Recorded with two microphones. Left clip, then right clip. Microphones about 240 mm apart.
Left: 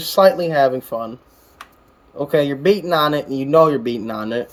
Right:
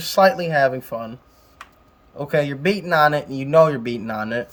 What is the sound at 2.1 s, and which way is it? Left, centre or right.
Speech, right.